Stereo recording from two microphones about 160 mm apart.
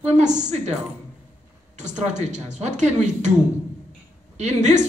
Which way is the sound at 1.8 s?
50° right (ahead or behind).